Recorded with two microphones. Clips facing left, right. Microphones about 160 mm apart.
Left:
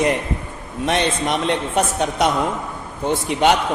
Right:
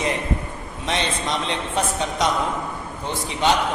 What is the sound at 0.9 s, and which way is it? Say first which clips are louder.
A man's voice: left 4 dB; 60° left (ahead or behind).